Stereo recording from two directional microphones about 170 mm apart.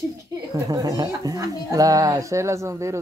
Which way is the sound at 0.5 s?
20° right (ahead or behind).